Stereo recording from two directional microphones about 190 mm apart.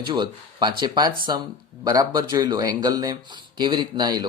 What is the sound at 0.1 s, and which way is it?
Speech, 25° right (ahead or behind).